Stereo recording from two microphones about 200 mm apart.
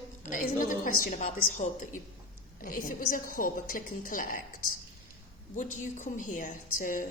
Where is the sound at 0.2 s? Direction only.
40° left (ahead or behind).